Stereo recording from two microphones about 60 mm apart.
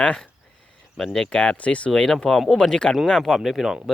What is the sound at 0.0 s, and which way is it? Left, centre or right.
Speech, centre.